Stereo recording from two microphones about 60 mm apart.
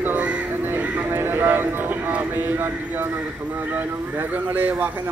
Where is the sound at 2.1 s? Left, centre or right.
Right.